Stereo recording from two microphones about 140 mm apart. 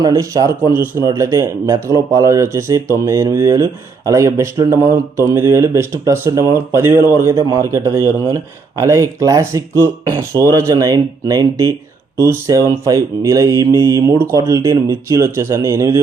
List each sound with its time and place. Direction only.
0.0 s speech: 25° right (ahead or behind)